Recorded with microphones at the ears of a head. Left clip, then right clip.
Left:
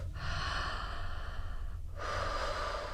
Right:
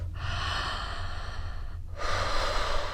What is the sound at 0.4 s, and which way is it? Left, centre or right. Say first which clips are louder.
Sigh: right 6 dB; right.